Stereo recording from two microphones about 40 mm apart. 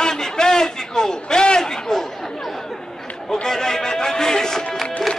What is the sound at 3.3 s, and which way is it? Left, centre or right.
Speech, centre.